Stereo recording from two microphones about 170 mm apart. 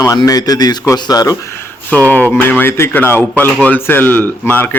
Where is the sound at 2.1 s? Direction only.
10° left (ahead or behind).